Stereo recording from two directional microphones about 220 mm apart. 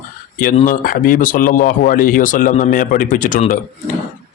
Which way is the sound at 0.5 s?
35° left (ahead or behind).